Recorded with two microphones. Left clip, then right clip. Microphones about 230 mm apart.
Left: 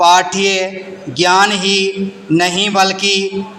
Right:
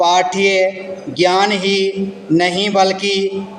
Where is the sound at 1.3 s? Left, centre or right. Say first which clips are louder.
Left 4 dB; left.